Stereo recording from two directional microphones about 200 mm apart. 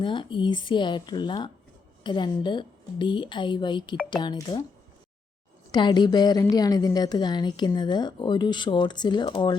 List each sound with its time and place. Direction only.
0.0 s a woman's voice: 25° left (ahead or behind)
5.7 s a woman's voice: 20° left (ahead or behind)